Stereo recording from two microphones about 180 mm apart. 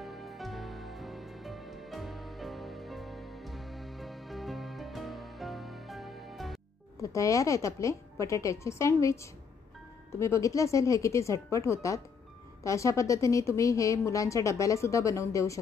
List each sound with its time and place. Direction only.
0.0 s music: centre (ahead or behind)
7.0 s speech: 15° left (ahead or behind)